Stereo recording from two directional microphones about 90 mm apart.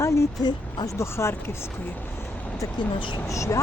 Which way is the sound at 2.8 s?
60° left (ahead or behind).